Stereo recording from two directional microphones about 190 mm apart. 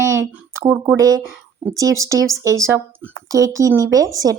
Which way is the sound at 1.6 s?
15° right (ahead or behind).